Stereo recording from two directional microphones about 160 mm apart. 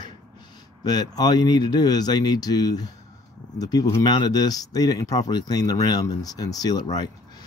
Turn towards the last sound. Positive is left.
turn(degrees=25)  # may be behind; listen again after turning